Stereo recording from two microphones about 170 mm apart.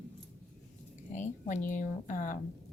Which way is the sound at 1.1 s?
45° left (ahead or behind).